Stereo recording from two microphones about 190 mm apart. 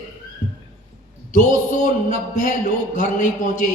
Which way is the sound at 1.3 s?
40° left (ahead or behind).